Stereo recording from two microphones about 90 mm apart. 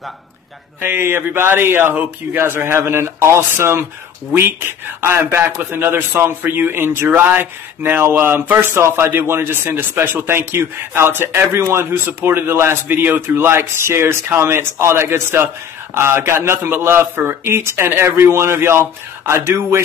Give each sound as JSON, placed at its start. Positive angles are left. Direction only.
{"t": 0.7, "sound": "a man's voice", "side_deg": -25}